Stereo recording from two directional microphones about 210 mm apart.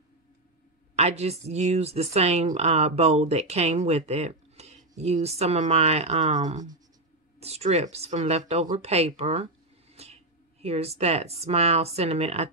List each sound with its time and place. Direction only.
0.9 s speech: 30° right (ahead or behind)